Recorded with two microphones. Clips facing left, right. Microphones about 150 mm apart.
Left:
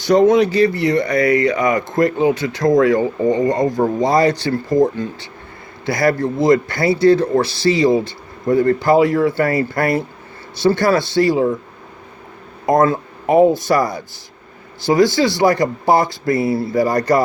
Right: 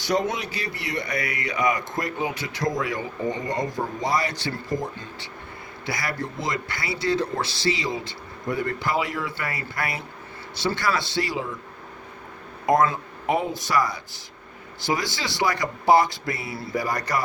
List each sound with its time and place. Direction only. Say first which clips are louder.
0.1 s speech: left 13 dB; 45° left (ahead or behind)
12.6 s speech: left 6 dB; 40° left (ahead or behind)